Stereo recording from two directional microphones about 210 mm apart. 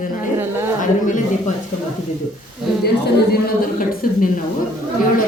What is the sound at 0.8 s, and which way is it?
Speech, 40° left (ahead or behind).